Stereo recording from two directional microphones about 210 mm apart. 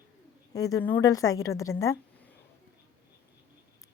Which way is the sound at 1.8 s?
15° left (ahead or behind).